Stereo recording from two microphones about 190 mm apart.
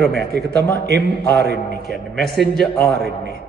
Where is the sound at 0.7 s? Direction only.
60° right (ahead or behind).